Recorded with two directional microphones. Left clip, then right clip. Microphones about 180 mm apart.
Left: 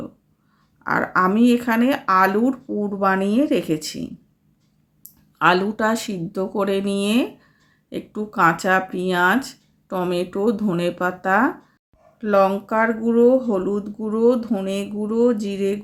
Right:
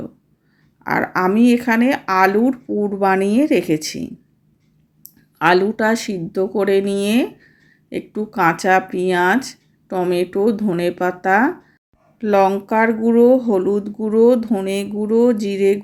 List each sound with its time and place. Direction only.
0.9 s speech: 15° right (ahead or behind)